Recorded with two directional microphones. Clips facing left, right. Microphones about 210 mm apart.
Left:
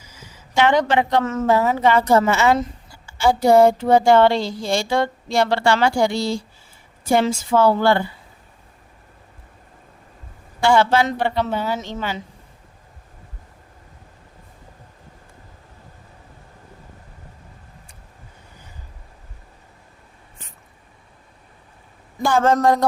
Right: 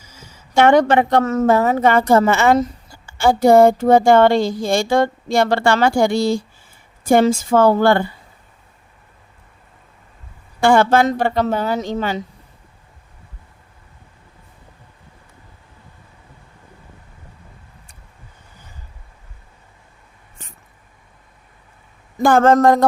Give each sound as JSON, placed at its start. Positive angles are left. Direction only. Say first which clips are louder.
{"t": 0.5, "sound": "a woman's voice", "louder": "right 5 dB", "side_deg": -50}
{"t": 10.6, "sound": "a woman's voice", "louder": "right 3 dB", "side_deg": -50}
{"t": 22.2, "sound": "a woman's voice", "louder": "right 5 dB", "side_deg": -55}